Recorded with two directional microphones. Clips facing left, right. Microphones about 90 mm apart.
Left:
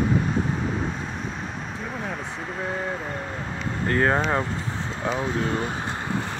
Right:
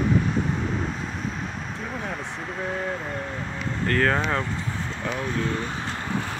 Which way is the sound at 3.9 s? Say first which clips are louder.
Left 1 dB; 20° left (ahead or behind).